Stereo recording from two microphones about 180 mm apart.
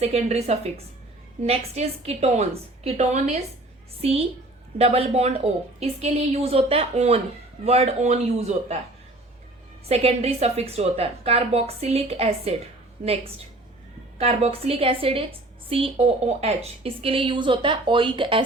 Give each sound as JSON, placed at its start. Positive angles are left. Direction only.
{"t": 0.0, "sound": "a woman's voice", "side_deg": -35}
{"t": 9.8, "sound": "a woman's voice", "side_deg": -35}